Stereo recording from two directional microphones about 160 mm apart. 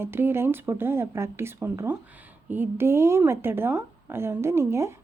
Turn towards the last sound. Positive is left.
turn(degrees=-15)  # may be behind; listen again after turning